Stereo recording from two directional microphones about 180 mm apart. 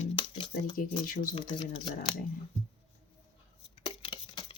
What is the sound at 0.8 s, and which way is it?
Speech, 50° left (ahead or behind).